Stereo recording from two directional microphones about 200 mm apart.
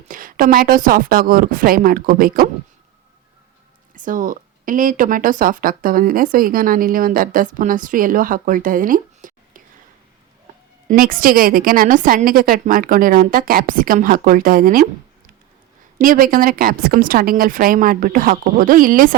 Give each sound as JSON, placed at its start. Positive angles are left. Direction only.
{"t": 0.1, "sound": "speech", "side_deg": -45}
{"t": 3.9, "sound": "speech", "side_deg": -40}
{"t": 10.8, "sound": "speech", "side_deg": -45}
{"t": 16.0, "sound": "speech", "side_deg": -45}